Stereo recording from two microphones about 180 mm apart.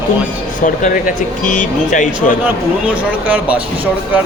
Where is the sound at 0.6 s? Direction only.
45° left (ahead or behind).